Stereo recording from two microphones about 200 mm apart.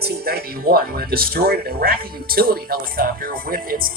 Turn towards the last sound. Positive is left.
turn(degrees=-45)  # may be behind; listen again after turning